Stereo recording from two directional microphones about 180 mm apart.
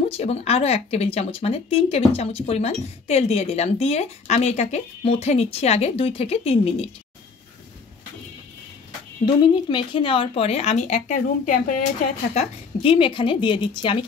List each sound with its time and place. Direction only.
0.2 s speech: 35° left (ahead or behind)
9.2 s speech: 25° left (ahead or behind); by 11.8 s 45° left (ahead or behind)
12.4 s a woman's voice: 30° left (ahead or behind)